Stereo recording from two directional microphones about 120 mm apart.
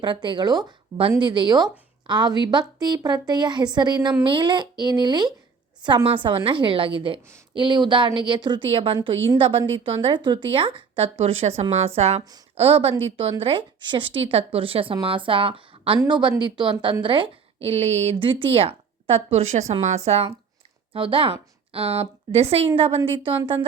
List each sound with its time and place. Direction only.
0.0 s a woman's voice: 40° right (ahead or behind)
16.0 s a woman's voice: 40° right (ahead or behind); by 20.3 s 60° right (ahead or behind)
20.9 s a woman's voice: 50° right (ahead or behind)